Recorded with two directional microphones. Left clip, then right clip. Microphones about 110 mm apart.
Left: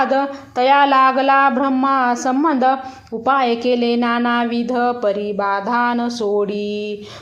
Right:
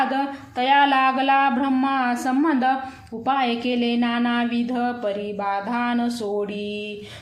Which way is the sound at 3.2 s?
35° left (ahead or behind).